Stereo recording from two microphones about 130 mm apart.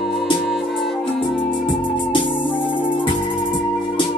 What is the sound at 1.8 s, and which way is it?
Music, 35° left (ahead or behind).